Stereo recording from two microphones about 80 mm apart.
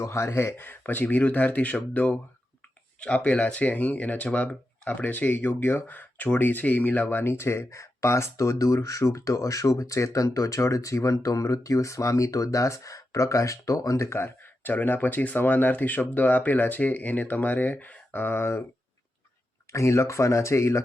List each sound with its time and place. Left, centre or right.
0.0 s speech: left
19.7 s speech: left